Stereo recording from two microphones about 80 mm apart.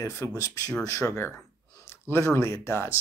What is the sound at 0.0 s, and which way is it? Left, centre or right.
Speech, left.